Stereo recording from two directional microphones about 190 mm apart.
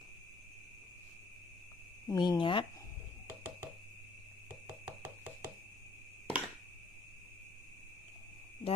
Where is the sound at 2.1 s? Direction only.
20° left (ahead or behind).